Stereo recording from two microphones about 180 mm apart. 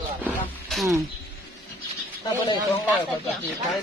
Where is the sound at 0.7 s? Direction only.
Centre (ahead or behind).